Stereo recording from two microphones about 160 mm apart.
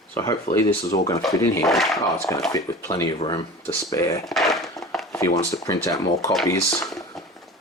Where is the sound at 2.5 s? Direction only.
20° left (ahead or behind).